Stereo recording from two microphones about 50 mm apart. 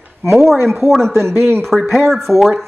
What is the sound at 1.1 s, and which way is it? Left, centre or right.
Speech, right.